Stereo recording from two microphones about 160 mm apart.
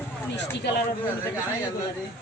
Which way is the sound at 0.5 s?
90° left.